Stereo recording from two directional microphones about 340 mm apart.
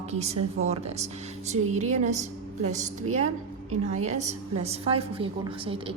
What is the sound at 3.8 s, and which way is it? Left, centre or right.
A woman's voice, centre.